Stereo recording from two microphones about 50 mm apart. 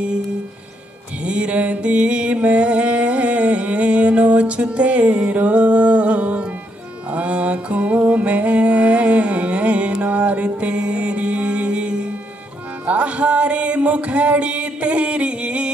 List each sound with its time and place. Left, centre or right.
1.2 s mantra: right
7.1 s music: right
10.0 s mantra: right
12.8 s music: right